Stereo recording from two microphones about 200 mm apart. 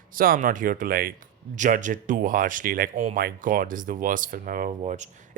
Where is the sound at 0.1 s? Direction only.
45° right (ahead or behind).